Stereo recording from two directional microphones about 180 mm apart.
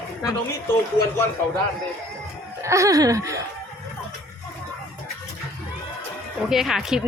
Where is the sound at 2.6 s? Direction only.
15° right (ahead or behind).